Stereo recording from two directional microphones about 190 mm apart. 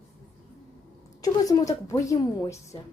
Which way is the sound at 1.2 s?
20° left (ahead or behind).